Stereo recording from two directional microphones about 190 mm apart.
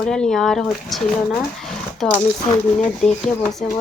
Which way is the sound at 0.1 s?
5° left (ahead or behind).